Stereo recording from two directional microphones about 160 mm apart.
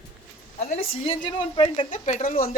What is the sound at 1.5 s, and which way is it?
Speech, 30° left (ahead or behind).